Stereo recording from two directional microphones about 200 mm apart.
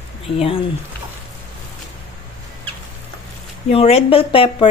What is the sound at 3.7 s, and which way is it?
A woman's voice, 30° left (ahead or behind).